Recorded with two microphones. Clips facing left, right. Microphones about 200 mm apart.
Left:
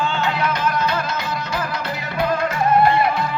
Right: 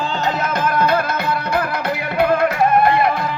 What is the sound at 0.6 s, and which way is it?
Music, 55° right (ahead or behind).